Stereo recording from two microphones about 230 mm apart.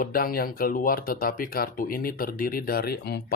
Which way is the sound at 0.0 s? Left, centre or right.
Left.